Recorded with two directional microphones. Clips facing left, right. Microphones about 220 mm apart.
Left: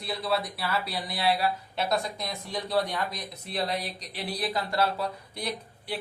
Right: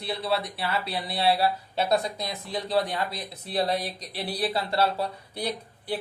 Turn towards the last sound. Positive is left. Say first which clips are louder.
# right 3 dB
turn(degrees=-35)  # may be behind; listen again after turning